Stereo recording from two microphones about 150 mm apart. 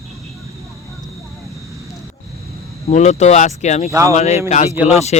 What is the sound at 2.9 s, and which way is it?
Speech, 50° left (ahead or behind).